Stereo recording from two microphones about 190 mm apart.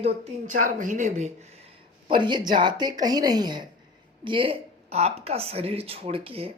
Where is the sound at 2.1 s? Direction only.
25° right (ahead or behind).